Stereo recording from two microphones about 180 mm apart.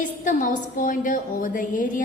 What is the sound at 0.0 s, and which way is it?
A woman's voice, 45° left (ahead or behind).